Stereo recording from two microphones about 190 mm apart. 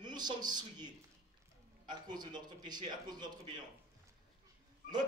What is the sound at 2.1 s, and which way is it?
A man's voice, 20° right (ahead or behind).